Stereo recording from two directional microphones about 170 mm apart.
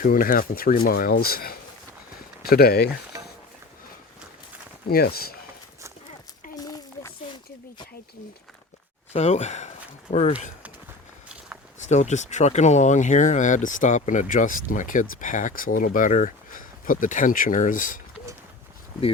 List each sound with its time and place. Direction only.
0.0 s speech: 55° left (ahead or behind)
4.9 s speech: 65° left (ahead or behind)
9.1 s speech: 40° left (ahead or behind)
11.8 s speech: 45° left (ahead or behind)